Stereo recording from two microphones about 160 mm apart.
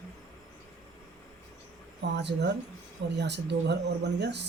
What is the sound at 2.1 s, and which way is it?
Speech, 90° right.